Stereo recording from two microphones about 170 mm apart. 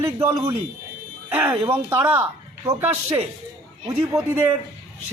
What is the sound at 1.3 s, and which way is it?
A man's voice, 20° right (ahead or behind).